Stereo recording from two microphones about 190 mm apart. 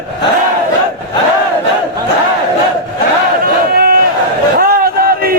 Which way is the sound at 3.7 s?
50° right (ahead or behind).